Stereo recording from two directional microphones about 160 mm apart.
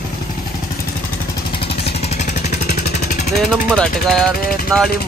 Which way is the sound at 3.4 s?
5° left (ahead or behind).